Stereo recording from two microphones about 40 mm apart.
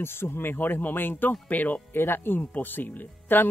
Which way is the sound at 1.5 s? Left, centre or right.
Left.